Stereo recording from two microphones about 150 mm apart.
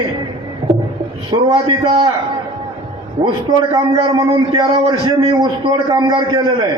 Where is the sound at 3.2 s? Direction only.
30° right (ahead or behind).